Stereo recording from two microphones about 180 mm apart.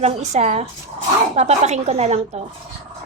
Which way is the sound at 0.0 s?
40° right (ahead or behind).